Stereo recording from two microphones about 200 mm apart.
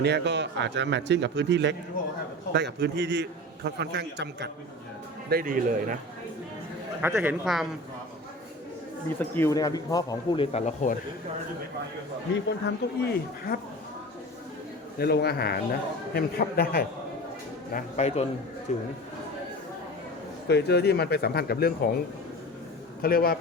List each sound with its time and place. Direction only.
0.0 s a man's voice: 60° right (ahead or behind)
5.3 s a man's voice: 45° right (ahead or behind)
7.0 s speech: 10° right (ahead or behind)
7.4 s speech: centre (ahead or behind)
9.3 s speech: 15° left (ahead or behind); by 10.9 s 35° left (ahead or behind)
12.5 s speech: 55° left (ahead or behind)
14.9 s speech: 50° left (ahead or behind)
17.7 s speech: 35° left (ahead or behind)
20.5 s speech: 55° left (ahead or behind)
23.0 s speech: 50° left (ahead or behind)